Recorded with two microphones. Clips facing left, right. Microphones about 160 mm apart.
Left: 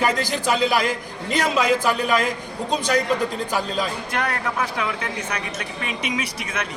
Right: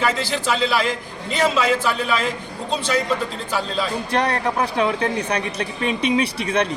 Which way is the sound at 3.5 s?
15° left (ahead or behind).